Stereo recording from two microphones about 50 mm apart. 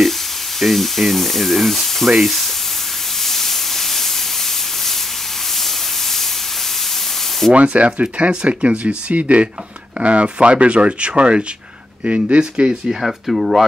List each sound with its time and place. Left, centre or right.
0.6 s speech: centre
3.2 s steam: centre
7.5 s speech: right
13.0 s speech: centre